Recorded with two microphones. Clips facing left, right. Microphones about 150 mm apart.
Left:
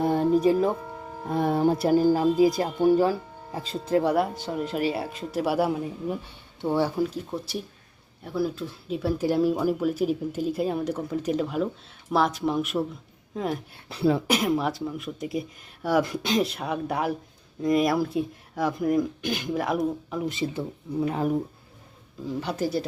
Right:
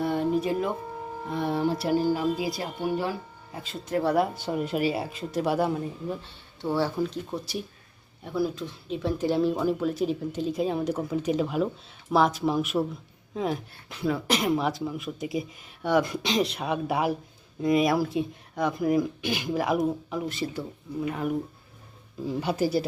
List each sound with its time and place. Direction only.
0.0 s music: 35° left (ahead or behind)
1.3 s speech: 45° left (ahead or behind)
4.4 s speech: 10° right (ahead or behind)
13.8 s speech: 35° left (ahead or behind)
14.3 s speech: centre (ahead or behind)
20.2 s speech: 20° left (ahead or behind)
21.0 s speech: 35° left (ahead or behind)
22.3 s speech: 10° right (ahead or behind)